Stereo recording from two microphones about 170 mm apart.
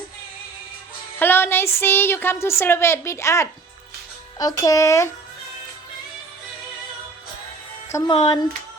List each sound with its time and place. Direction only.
1.2 s a woman's voice: 15° left (ahead or behind)
7.9 s speech: 20° left (ahead or behind)